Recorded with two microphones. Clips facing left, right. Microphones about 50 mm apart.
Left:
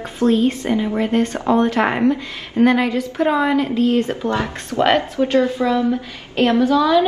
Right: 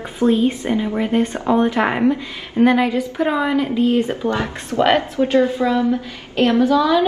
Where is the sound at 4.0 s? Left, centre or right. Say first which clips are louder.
Even; right.